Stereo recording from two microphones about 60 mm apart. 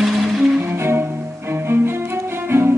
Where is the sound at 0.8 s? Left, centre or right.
Right.